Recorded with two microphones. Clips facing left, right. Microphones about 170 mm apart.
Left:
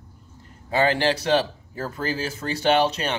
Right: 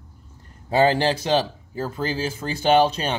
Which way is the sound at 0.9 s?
35° right (ahead or behind).